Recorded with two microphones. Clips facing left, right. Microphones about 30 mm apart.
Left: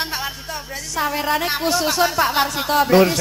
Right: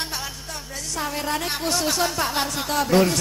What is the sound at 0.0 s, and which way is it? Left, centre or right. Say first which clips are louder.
A woman's voice: left 5 dB; left.